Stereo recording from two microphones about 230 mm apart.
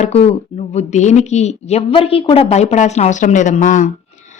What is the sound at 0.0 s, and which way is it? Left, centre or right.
A woman's voice, left.